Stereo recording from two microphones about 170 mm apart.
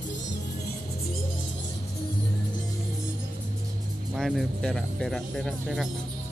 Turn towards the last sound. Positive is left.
turn(degrees=0)  # may be behind; listen again after turning